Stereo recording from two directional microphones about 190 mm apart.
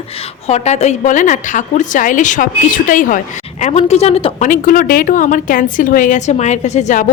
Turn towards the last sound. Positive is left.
turn(degrees=40)  # may be behind; listen again after turning